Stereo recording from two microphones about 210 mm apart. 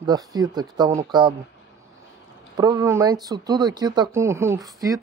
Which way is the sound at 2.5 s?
15° right (ahead or behind).